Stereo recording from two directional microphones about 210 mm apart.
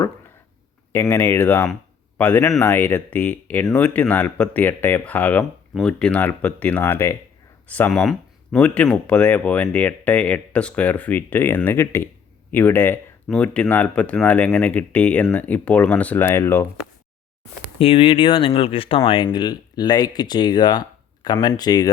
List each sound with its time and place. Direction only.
0.9 s speech: 10° left (ahead or behind)
17.7 s speech: 25° left (ahead or behind)